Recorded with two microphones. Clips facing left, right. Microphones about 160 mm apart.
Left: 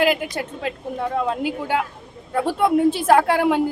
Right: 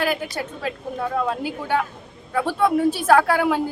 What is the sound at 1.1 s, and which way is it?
A woman's voice, 20° left (ahead or behind).